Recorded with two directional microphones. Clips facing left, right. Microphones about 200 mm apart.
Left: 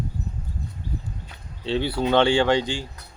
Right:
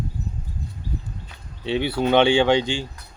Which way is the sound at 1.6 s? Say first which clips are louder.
Right 2 dB; 20° right (ahead or behind).